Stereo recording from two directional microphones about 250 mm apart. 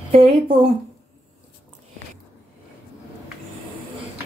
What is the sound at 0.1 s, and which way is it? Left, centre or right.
Speech, right.